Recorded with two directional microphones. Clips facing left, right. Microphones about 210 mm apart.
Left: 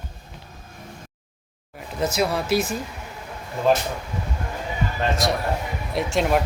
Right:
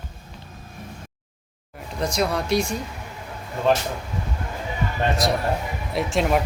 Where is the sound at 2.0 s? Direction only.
5° left (ahead or behind).